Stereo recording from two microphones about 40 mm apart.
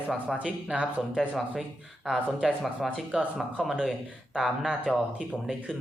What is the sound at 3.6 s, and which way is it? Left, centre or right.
Speech, centre.